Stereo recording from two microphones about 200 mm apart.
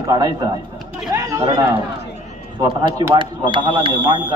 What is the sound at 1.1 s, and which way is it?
Chatter, 15° right (ahead or behind).